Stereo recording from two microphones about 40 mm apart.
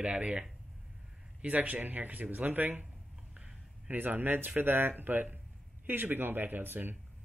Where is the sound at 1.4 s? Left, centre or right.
Right.